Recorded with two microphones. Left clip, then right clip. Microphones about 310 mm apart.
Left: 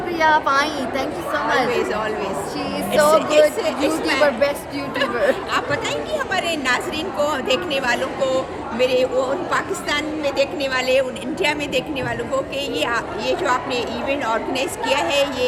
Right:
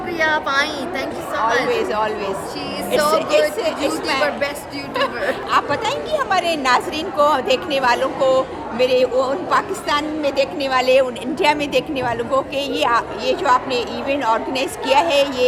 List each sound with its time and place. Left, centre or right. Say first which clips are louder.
0.2 s speech: left 2 dB; centre
1.7 s a woman's voice: right 2 dB; centre
2.9 s speech: left 2 dB; centre
3.2 s a woman's voice: left 1 dB; centre
5.5 s a woman's voice: right 3 dB; centre